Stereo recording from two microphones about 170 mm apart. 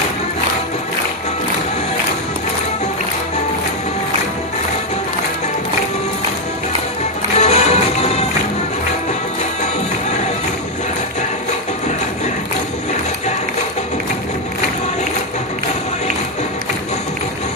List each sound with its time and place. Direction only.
7.3 s music: 40° left (ahead or behind)